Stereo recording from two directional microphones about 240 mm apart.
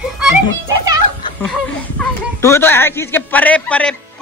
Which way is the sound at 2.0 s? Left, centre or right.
Centre.